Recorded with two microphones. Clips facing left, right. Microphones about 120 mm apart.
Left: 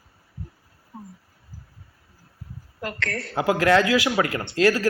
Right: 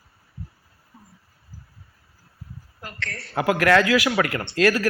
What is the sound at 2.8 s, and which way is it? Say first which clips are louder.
Speech: left 7 dB; 80° left.